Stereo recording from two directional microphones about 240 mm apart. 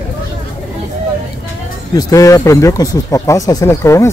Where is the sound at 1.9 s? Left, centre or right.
Centre.